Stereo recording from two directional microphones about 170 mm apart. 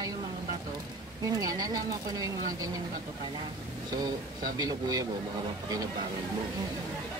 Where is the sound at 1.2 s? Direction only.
20° right (ahead or behind).